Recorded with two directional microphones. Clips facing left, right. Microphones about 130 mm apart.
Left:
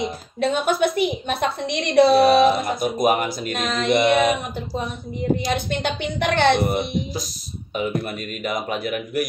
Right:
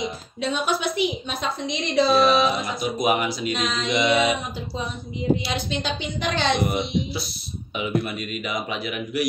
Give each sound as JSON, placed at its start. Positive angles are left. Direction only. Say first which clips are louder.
{"t": 0.4, "sound": "a woman's voice", "louder": "left 5 dB", "side_deg": 55}